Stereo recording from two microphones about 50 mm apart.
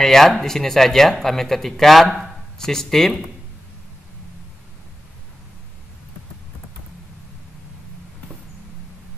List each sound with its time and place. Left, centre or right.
0.0 s speech: centre